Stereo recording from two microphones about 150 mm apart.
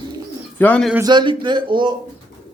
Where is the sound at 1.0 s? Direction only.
30° right (ahead or behind).